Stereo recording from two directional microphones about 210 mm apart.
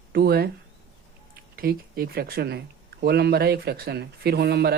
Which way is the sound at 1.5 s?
45° right (ahead or behind).